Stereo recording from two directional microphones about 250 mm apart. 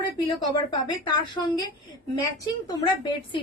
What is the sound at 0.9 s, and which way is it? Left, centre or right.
Speech, left.